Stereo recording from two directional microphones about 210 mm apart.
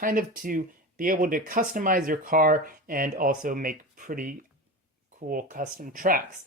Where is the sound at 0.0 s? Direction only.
40° right (ahead or behind).